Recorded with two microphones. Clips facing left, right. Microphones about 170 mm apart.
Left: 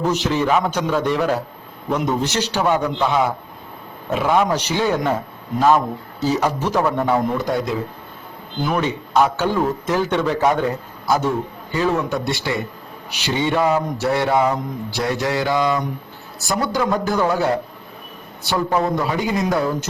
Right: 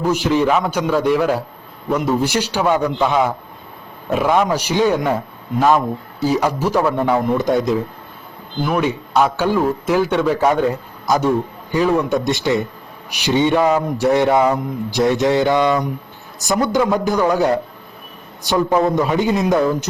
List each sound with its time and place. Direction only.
0.0 s speech: 10° right (ahead or behind)
7.3 s a woman's voice: 20° right (ahead or behind)
8.6 s a man's voice: 5° right (ahead or behind); by 19.9 s 20° right (ahead or behind)